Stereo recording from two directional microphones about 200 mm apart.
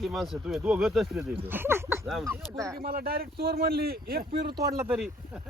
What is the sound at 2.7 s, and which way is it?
Speech, 50° right (ahead or behind).